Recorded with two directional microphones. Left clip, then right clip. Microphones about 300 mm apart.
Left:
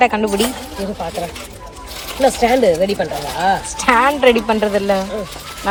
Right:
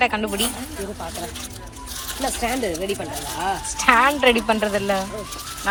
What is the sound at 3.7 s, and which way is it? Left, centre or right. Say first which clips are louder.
Speech: right 1 dB; centre.